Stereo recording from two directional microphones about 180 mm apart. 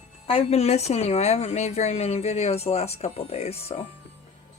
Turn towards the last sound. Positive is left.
turn(degrees=35)  # may be behind; listen again after turning